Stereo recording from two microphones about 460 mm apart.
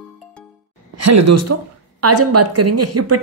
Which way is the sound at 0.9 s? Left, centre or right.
Right.